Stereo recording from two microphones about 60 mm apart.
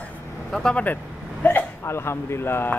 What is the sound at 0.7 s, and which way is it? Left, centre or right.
Speech, left.